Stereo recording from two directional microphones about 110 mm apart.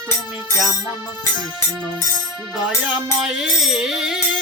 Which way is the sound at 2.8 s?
5° right (ahead or behind).